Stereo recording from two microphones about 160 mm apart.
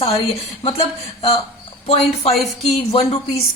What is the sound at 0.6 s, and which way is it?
Speech, 40° left (ahead or behind).